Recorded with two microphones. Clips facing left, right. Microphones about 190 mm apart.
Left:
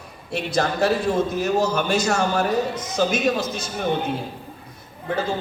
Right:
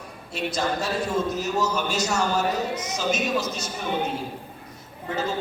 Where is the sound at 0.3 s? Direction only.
65° left (ahead or behind).